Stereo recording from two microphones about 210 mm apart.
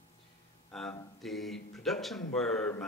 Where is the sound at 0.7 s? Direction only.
5° left (ahead or behind).